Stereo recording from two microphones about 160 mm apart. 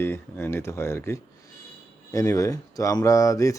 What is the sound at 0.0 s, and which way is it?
Speech, 15° left (ahead or behind).